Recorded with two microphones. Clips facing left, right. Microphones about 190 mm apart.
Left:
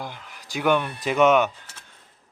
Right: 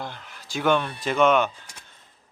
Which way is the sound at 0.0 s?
10° left (ahead or behind).